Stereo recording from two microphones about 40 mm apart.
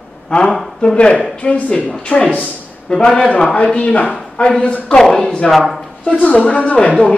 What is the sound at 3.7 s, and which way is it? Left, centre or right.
Speech, left.